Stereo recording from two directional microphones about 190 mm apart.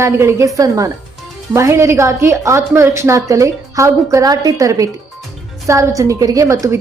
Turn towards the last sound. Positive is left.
turn(degrees=-15)  # may be behind; listen again after turning